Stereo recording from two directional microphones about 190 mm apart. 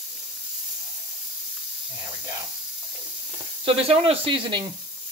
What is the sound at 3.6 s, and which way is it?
Speech, 30° right (ahead or behind).